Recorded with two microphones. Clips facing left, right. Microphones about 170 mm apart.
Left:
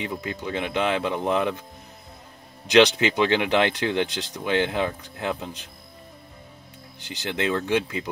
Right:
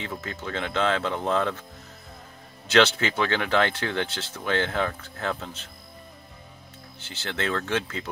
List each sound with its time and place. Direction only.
0.0 s speech: 15° left (ahead or behind)
2.7 s speech: 15° left (ahead or behind)
7.0 s speech: 15° left (ahead or behind)